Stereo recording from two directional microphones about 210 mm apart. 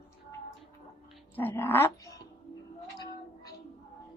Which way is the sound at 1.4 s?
10° left (ahead or behind).